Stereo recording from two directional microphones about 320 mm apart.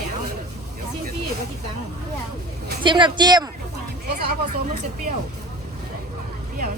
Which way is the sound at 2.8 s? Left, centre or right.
Centre.